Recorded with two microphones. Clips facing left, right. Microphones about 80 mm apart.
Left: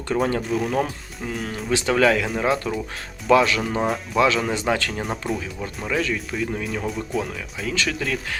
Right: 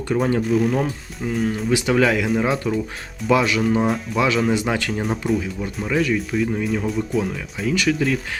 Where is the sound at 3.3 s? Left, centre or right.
Centre.